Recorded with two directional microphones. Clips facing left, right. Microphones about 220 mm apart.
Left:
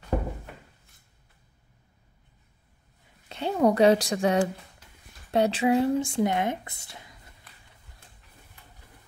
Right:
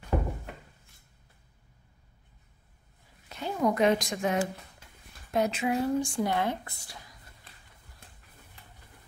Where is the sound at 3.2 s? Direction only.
30° left (ahead or behind).